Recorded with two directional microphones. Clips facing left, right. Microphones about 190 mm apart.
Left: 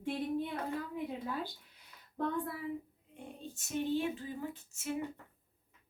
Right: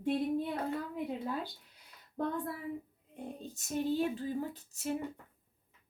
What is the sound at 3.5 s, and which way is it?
Speech, 40° right (ahead or behind).